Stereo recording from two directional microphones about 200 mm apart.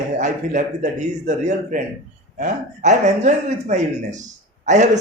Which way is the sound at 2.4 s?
35° right (ahead or behind).